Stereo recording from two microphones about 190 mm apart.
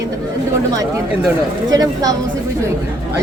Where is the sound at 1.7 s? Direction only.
20° right (ahead or behind).